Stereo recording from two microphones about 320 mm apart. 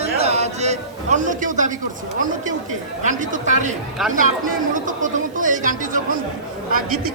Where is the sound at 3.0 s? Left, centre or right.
Right.